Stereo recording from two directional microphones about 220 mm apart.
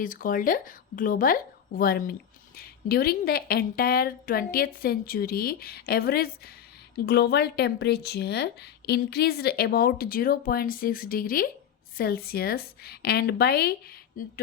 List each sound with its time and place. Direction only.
0.0 s speech: 40° left (ahead or behind)